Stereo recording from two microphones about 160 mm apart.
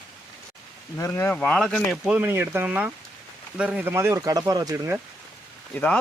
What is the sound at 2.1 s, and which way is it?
Speech, 10° right (ahead or behind).